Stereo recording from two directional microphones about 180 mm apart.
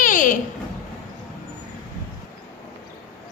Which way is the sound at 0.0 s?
45° left (ahead or behind).